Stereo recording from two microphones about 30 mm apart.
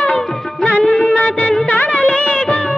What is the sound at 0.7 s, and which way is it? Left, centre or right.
Music, left.